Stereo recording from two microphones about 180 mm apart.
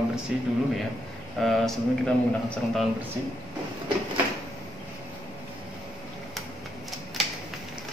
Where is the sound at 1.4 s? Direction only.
Centre (ahead or behind).